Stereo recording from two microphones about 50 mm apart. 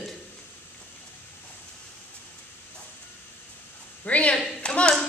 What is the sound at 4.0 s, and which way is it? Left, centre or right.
Speech, left.